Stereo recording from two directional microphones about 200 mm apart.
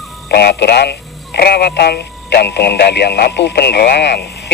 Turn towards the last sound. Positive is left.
turn(degrees=55)  # may be behind; listen again after turning